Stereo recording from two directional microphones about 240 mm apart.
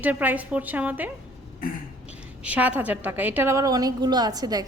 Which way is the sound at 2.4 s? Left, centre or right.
Centre.